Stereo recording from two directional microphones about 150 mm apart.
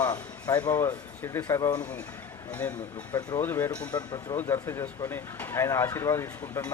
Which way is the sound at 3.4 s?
15° left (ahead or behind).